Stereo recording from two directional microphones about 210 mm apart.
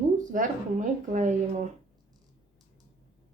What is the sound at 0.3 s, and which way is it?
A woman's voice, 40° right (ahead or behind).